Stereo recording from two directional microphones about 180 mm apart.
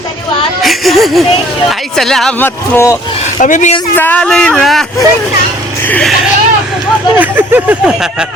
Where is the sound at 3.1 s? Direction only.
45° left (ahead or behind).